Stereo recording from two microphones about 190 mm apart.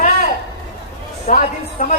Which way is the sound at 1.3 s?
40° left (ahead or behind).